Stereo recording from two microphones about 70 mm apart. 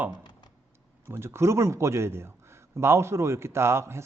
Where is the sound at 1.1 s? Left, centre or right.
Right.